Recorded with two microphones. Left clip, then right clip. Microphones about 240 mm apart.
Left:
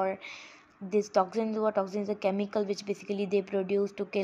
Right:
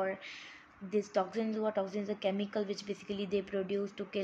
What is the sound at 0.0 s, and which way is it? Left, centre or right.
A woman's voice, left.